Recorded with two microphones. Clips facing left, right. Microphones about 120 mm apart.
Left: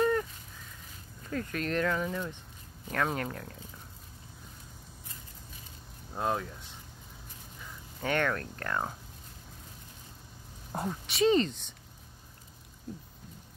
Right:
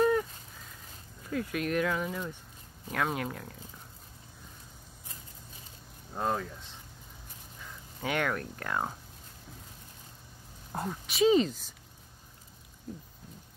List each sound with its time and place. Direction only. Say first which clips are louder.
0.0 s a sound: right 2 dB; 5° right (ahead or behind)
1.3 s speech: right 1 dB; 10° right (ahead or behind)
6.1 s speech: even; 5° left (ahead or behind)
8.0 s speech: left 1 dB; 10° right (ahead or behind)
10.7 s speech: left 1 dB; centre (ahead or behind)